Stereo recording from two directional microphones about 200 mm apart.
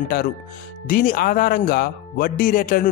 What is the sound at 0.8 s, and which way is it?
Speech, 45° left (ahead or behind).